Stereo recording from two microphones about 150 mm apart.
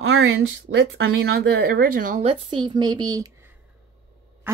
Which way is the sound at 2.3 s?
35° right (ahead or behind).